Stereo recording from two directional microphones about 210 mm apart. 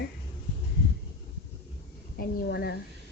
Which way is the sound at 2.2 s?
50° left (ahead or behind).